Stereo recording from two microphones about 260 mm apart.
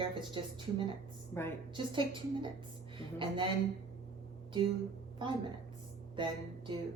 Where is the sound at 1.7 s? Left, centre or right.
Centre.